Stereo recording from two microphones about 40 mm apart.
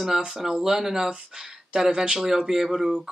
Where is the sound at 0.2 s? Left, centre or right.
Centre.